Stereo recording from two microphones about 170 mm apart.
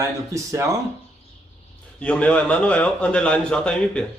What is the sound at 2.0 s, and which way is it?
A man's voice, 5° left (ahead or behind).